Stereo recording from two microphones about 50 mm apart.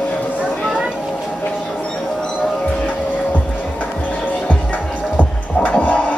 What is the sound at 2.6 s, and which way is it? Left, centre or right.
Music, left.